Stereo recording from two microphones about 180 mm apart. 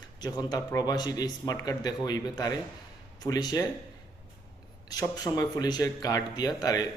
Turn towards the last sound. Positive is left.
turn(degrees=20)  # may be behind; listen again after turning